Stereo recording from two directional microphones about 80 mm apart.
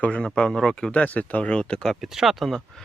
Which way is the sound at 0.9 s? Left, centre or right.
Centre.